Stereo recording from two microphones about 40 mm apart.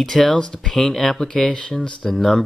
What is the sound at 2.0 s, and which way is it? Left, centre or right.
Speech, centre.